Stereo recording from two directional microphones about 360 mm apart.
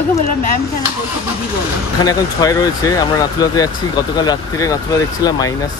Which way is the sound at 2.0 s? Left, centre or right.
Centre.